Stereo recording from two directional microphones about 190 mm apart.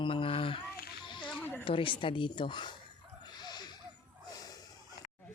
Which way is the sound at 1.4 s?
10° left (ahead or behind).